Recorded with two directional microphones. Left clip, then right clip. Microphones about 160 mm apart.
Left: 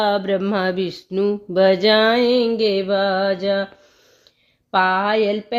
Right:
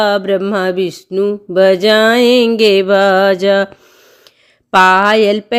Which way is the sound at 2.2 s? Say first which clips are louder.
Right 7 dB; 35° right (ahead or behind).